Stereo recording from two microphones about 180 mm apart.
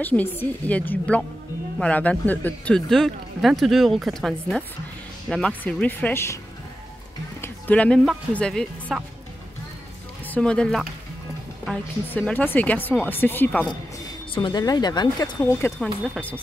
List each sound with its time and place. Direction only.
0.0 s speech: 10° left (ahead or behind)
7.4 s speech: 10° left (ahead or behind)
10.2 s speech: 5° left (ahead or behind)
13.9 s speech: 25° left (ahead or behind)
15.8 s speech: 10° left (ahead or behind)